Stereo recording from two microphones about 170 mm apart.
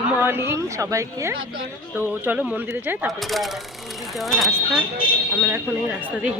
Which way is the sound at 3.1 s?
Centre (ahead or behind).